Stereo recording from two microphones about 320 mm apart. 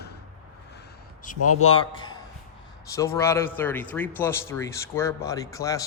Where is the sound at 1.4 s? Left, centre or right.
Left.